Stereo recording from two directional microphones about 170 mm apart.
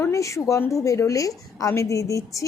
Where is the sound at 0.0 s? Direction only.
20° left (ahead or behind).